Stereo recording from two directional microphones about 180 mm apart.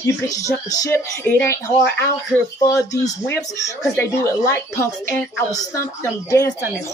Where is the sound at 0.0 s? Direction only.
15° left (ahead or behind).